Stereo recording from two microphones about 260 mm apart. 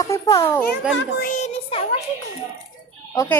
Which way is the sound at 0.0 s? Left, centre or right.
Centre.